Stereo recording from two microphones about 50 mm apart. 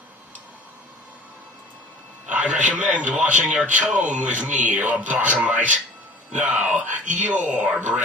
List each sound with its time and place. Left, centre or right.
2.2 s speech: right